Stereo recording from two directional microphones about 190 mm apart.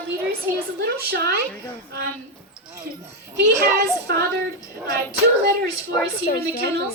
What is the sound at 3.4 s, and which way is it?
Speech, 60° right (ahead or behind).